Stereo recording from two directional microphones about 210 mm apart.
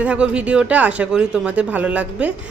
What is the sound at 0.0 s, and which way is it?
A woman's voice, 5° right (ahead or behind).